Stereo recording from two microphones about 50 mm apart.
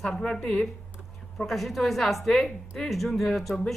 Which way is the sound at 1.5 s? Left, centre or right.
Centre.